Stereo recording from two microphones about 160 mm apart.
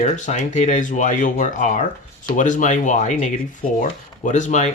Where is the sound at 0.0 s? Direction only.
45° left (ahead or behind).